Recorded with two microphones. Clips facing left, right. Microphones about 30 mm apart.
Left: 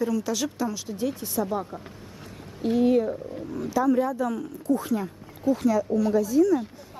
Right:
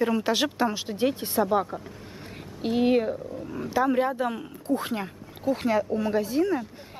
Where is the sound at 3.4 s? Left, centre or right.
Right.